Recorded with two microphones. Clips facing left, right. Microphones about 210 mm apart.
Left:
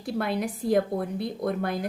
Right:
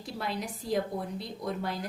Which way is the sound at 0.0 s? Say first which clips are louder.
Left 8 dB; 55° left (ahead or behind).